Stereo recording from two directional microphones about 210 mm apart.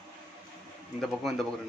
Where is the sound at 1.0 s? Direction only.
Centre (ahead or behind).